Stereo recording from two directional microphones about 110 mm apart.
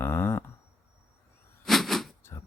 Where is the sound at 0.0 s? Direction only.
20° left (ahead or behind).